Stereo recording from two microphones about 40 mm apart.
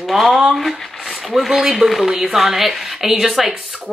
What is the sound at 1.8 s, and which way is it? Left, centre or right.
Speech, centre.